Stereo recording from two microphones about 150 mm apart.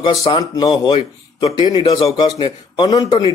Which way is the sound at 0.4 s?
30° left (ahead or behind).